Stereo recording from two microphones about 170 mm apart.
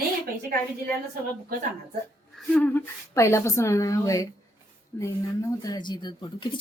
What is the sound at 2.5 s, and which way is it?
Speech, 10° left (ahead or behind).